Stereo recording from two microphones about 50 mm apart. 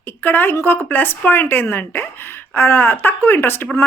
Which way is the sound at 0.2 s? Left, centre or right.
Left.